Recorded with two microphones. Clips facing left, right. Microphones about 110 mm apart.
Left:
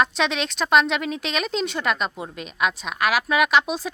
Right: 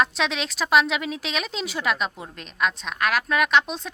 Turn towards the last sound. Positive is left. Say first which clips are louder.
# left 2 dB
turn(degrees=5)  # may be behind; listen again after turning